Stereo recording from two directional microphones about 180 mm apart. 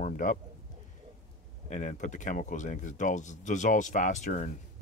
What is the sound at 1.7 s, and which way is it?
Speech, 45° left (ahead or behind).